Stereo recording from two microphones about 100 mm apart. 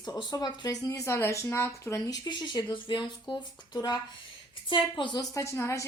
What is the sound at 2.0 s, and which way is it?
A woman's voice, 45° left (ahead or behind).